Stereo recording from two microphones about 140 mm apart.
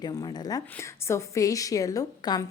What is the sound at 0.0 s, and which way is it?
A woman's voice, 30° left (ahead or behind).